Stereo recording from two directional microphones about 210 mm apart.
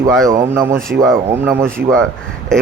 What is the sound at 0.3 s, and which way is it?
Speech, 15° right (ahead or behind).